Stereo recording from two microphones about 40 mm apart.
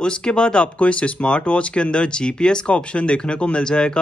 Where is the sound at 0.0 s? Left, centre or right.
Left.